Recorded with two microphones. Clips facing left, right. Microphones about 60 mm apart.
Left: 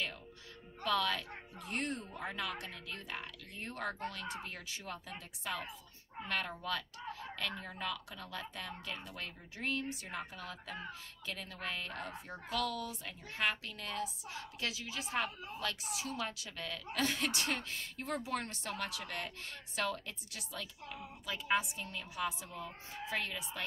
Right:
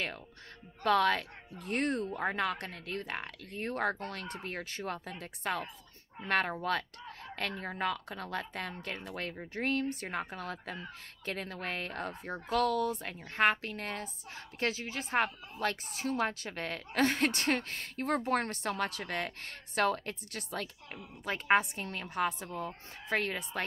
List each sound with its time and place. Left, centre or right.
0.8 s a woman's voice: right